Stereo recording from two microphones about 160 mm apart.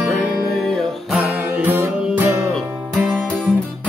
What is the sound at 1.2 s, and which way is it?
Music, 10° right (ahead or behind).